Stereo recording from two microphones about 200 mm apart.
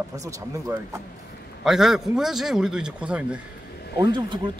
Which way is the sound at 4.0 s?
20° right (ahead or behind).